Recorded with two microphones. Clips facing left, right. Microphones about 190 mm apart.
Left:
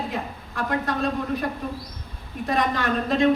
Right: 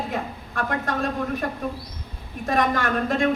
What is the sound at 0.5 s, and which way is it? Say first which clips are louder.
Speech: left 1 dB; 50° right (ahead or behind).